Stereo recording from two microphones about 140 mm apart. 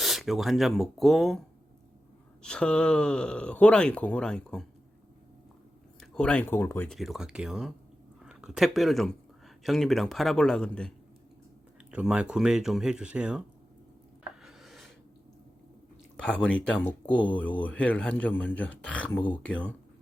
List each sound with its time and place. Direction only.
0.0 s speech: centre (ahead or behind)
2.4 s speech: 5° left (ahead or behind)
6.0 s speech: 5° left (ahead or behind)
6.9 s speech: centre (ahead or behind)
11.9 s speech: 10° right (ahead or behind)
14.4 s a sound: centre (ahead or behind)
16.1 s speech: 5° left (ahead or behind)
17.1 s speech: 35° left (ahead or behind)
17.3 s speech: 10° left (ahead or behind)